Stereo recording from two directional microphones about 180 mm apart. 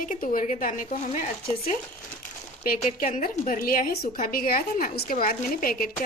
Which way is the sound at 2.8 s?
40° left (ahead or behind).